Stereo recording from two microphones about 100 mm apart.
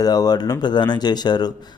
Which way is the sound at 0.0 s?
40° left (ahead or behind).